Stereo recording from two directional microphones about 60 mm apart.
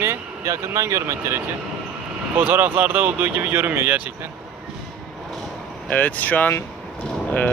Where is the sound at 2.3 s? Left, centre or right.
Right.